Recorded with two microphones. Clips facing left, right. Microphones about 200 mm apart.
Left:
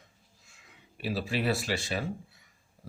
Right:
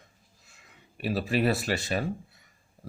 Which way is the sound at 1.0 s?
50° right (ahead or behind).